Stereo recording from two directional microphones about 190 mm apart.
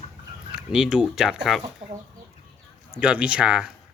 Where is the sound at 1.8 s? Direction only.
30° right (ahead or behind).